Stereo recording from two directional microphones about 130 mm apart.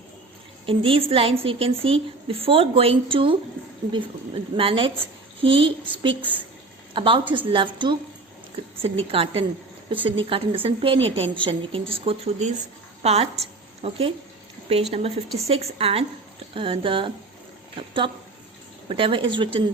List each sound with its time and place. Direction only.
0.6 s a woman's voice: 45° right (ahead or behind)
4.5 s a woman's voice: 45° right (ahead or behind)
13.8 s a woman's voice: 45° right (ahead or behind)